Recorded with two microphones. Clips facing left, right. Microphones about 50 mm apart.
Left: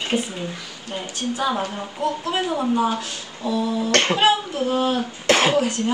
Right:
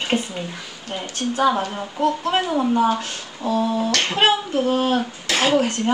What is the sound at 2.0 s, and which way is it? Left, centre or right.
Speech, right.